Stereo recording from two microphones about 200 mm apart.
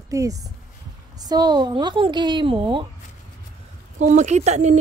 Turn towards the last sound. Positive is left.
turn(degrees=-35)  # may be behind; listen again after turning